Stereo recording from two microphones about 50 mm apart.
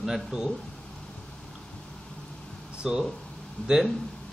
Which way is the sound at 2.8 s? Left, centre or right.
Centre.